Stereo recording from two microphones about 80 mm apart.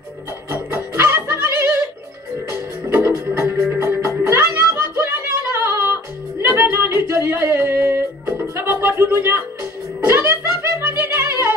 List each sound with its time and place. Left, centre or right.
0.5 s music: right
4.3 s a sound: right
6.4 s music: right